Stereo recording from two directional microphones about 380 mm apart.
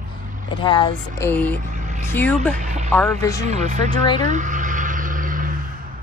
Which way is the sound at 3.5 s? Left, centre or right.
Centre.